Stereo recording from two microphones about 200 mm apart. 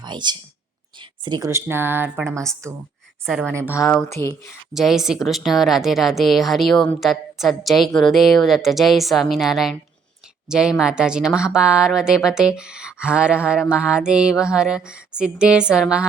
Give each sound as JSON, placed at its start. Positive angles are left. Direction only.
{"t": 0.0, "sound": "speech", "side_deg": -20}
{"t": 3.2, "sound": "speech", "side_deg": -5}
{"t": 3.8, "sound": "speech", "side_deg": 10}
{"t": 4.7, "sound": "speech", "side_deg": 0}